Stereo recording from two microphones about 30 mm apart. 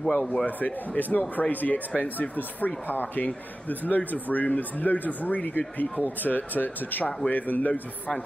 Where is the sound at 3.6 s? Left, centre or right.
Left.